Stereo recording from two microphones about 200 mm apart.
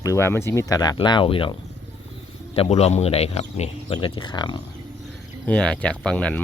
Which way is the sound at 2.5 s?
30° left (ahead or behind).